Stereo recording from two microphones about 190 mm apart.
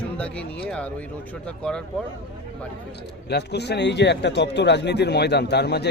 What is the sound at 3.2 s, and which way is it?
A man's voice, 60° left (ahead or behind).